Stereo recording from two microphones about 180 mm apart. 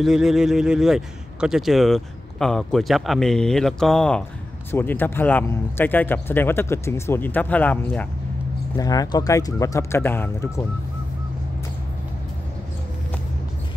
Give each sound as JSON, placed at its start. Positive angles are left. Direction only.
{"t": 0.0, "sound": "speech", "side_deg": 0}
{"t": 8.7, "sound": "speech", "side_deg": 20}